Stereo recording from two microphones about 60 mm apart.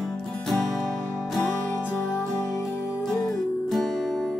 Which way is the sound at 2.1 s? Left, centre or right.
Centre.